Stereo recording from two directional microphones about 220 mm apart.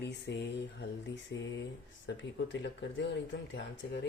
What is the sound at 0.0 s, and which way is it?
Speech, 50° left (ahead or behind).